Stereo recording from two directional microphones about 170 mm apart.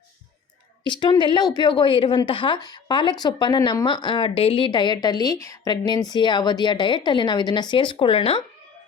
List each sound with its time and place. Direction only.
0.9 s speech: 25° left (ahead or behind)